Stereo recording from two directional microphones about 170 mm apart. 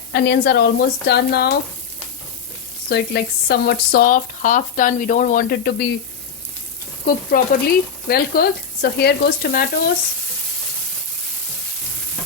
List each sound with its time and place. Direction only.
0.1 s a woman's voice: 75° left (ahead or behind)
2.9 s speech: 75° left (ahead or behind)
7.0 s stir: 60° left (ahead or behind)
8.0 s speech: 60° left (ahead or behind)